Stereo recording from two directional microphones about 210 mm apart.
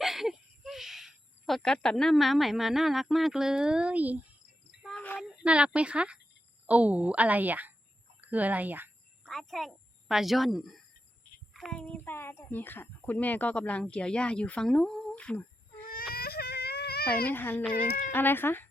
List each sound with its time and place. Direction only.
0.0 s speech: centre (ahead or behind)
4.7 s child singing: centre (ahead or behind)
5.4 s a woman's voice: 5° right (ahead or behind)
15.9 s baby cry: 45° left (ahead or behind)
17.2 s speech: 10° left (ahead or behind)
17.7 s speech: 40° left (ahead or behind)
18.1 s speech: 10° left (ahead or behind)